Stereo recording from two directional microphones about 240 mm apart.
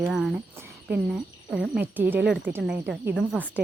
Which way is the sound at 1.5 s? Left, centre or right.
Centre.